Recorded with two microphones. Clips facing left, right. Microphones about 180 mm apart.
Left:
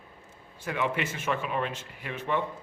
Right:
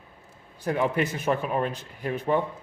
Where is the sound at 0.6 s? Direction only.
40° right (ahead or behind).